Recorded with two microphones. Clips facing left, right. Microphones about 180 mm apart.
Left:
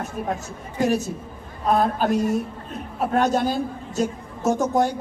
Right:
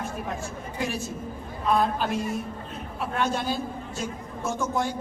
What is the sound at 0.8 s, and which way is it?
A woman's voice, 40° left (ahead or behind).